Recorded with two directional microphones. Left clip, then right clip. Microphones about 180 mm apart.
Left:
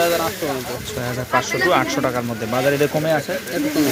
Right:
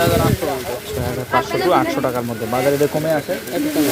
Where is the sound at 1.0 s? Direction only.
5° right (ahead or behind).